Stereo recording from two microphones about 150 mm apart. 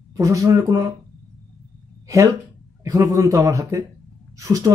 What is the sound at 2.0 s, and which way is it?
Speech, 20° right (ahead or behind).